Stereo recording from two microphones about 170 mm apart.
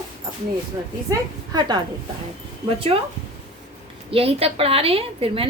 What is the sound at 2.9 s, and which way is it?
Speech, 30° right (ahead or behind).